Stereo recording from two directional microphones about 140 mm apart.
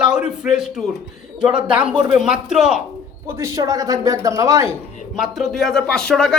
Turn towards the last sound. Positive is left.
turn(degrees=5)  # may be behind; listen again after turning